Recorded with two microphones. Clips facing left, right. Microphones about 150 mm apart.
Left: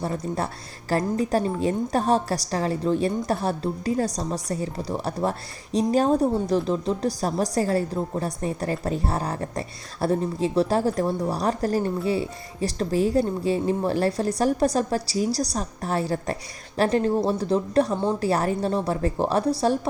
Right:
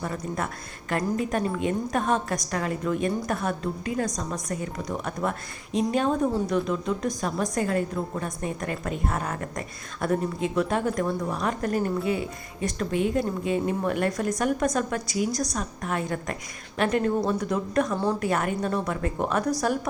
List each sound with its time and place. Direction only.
0.0 s a woman's voice: 30° left (ahead or behind)
17.9 s a woman's voice: 20° left (ahead or behind)
18.3 s a woman's voice: 35° left (ahead or behind)